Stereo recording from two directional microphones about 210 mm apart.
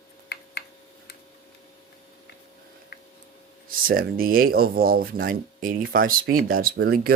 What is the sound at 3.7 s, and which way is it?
Speech, 45° right (ahead or behind).